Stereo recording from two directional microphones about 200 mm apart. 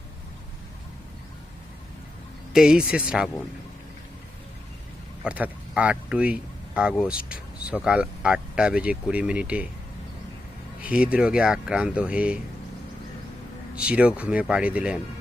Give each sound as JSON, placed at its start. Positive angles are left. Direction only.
{"t": 2.5, "sound": "speech", "side_deg": -5}
{"t": 5.2, "sound": "speech", "side_deg": -5}
{"t": 10.8, "sound": "speech", "side_deg": -5}
{"t": 13.7, "sound": "speech", "side_deg": -5}